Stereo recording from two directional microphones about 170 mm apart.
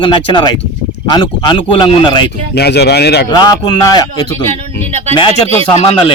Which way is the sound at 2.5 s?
75° left (ahead or behind).